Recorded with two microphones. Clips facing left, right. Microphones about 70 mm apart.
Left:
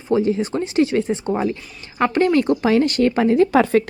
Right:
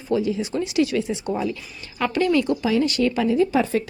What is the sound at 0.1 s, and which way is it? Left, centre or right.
A woman's voice, left.